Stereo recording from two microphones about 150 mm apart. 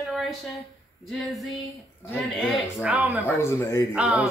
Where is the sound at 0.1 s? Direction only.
Centre (ahead or behind).